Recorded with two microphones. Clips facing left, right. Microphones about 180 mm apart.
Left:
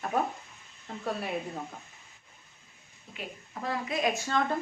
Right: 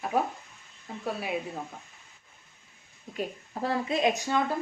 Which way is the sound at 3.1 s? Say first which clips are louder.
Right 7 dB; 35° right (ahead or behind).